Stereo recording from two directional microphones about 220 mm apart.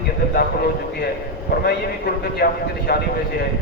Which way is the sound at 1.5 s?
40° left (ahead or behind).